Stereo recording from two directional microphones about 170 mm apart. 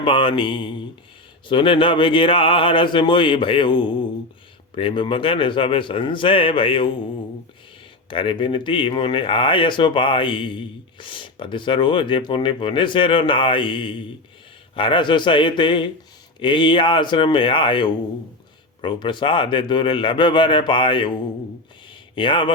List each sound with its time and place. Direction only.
0.0 s a man's voice: 30° left (ahead or behind)
8.1 s speech: 30° left (ahead or behind)
22.1 s speech: 30° left (ahead or behind)